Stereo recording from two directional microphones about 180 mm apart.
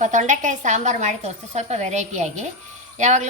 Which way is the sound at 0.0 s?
45° right (ahead or behind).